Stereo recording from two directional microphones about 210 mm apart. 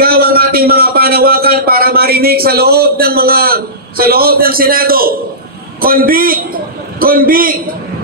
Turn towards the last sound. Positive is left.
turn(degrees=-45)  # may be behind; listen again after turning